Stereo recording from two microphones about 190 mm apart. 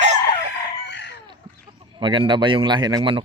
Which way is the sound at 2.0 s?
25° right (ahead or behind).